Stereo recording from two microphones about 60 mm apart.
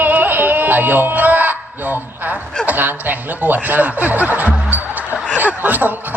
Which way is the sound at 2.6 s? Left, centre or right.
Right.